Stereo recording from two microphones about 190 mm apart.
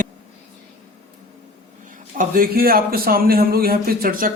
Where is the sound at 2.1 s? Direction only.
50° right (ahead or behind).